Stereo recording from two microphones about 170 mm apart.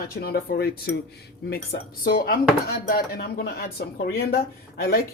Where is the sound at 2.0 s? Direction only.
60° left (ahead or behind).